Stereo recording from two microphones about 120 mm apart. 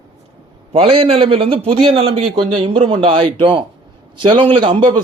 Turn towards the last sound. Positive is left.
turn(degrees=-45)  # may be behind; listen again after turning